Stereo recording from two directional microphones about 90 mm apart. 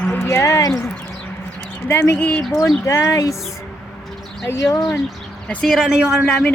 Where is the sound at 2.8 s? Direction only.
35° left (ahead or behind).